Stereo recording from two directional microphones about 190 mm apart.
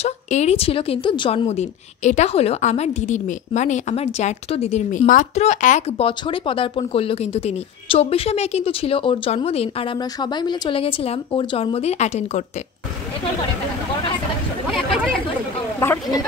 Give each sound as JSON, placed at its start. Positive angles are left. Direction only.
{"t": 0.0, "sound": "a woman's voice", "side_deg": 35}
{"t": 15.8, "sound": "speech", "side_deg": 10}